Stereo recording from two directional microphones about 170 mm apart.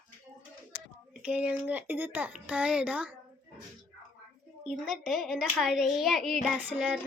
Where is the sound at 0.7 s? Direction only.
90° left.